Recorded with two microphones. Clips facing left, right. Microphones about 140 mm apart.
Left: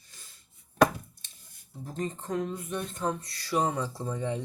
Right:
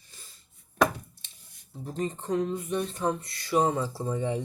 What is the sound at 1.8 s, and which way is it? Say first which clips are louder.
Speech: right 2 dB; 15° right (ahead or behind).